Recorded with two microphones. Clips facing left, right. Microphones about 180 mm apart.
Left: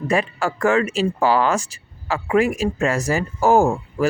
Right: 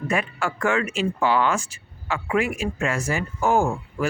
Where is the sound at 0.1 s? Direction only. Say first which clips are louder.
Left 5 dB; 35° left (ahead or behind).